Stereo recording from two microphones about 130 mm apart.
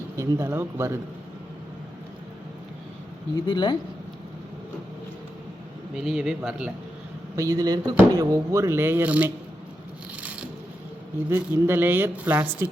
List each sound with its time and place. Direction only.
0.2 s speech: 20° right (ahead or behind)
3.4 s speech: 35° left (ahead or behind)
6.0 s speech: 5° right (ahead or behind)
7.3 s speech: 25° right (ahead or behind); by 9.3 s 10° right (ahead or behind)
11.3 s a woman's voice: 20° right (ahead or behind)